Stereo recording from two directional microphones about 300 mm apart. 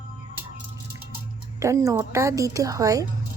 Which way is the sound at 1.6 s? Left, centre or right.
Centre.